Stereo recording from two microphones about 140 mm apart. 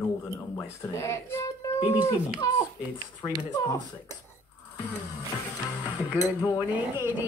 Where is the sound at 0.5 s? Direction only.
20° left (ahead or behind).